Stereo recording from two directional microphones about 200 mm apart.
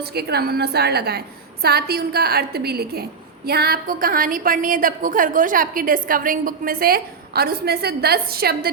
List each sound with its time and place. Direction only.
0.0 s a woman's voice: 55° right (ahead or behind)